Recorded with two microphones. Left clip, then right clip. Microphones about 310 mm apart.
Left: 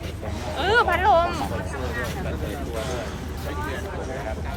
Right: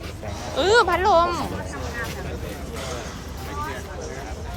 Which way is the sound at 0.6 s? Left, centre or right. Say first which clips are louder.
Right 2 dB; centre.